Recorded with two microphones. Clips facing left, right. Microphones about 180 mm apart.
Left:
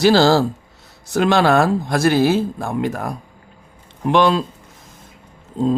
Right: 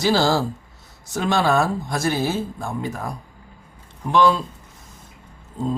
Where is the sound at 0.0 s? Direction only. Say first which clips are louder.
Left 6 dB; 75° left (ahead or behind).